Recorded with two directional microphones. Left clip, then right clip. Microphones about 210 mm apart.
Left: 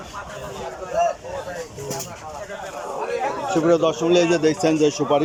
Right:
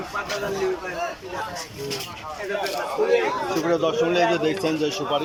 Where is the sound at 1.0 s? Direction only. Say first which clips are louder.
Left 14 dB; 50° left (ahead or behind).